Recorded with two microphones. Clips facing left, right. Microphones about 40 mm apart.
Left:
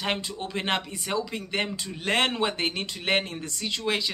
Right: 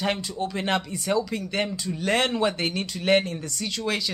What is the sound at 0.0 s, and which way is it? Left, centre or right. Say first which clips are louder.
Speech: right 3 dB; left.